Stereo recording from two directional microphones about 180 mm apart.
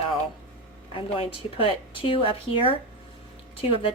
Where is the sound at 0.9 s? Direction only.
30° left (ahead or behind).